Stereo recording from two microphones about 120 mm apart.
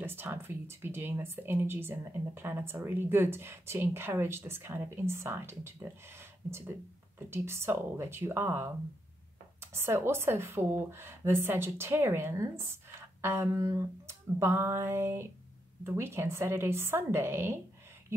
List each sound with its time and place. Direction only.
0.0 s speech: 20° right (ahead or behind)